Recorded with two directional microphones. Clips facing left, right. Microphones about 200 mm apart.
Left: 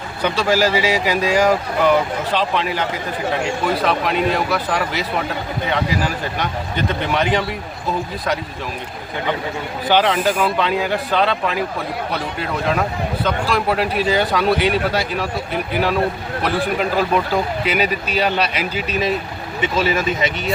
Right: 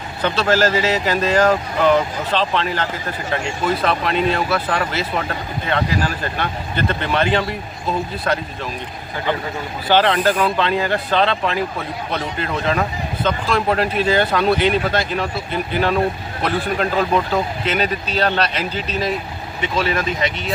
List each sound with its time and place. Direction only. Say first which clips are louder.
0.2 s speech: even; 10° left (ahead or behind)
9.9 s speech: right 1 dB; 10° left (ahead or behind)